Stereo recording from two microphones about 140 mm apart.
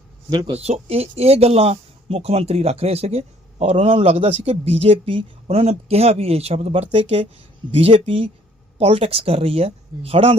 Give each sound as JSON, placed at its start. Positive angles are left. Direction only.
{"t": 0.3, "sound": "speech", "side_deg": -30}
{"t": 0.5, "sound": "speech", "side_deg": -50}